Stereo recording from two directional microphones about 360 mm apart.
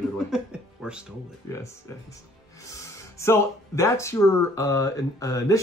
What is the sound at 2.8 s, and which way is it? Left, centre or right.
Speech, centre.